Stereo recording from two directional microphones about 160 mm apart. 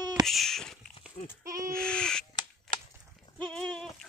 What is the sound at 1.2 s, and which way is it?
Speech, 45° left (ahead or behind).